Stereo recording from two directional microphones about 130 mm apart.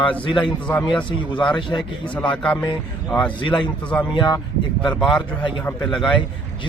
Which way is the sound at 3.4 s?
40° left (ahead or behind).